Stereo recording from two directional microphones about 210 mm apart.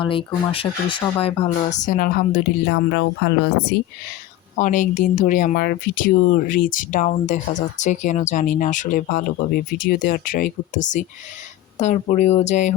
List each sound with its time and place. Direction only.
0.0 s speech: 25° left (ahead or behind); by 3.8 s 55° left (ahead or behind)
4.5 s speech: 35° left (ahead or behind)